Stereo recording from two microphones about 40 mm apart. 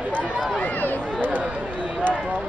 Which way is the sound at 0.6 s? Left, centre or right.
Left.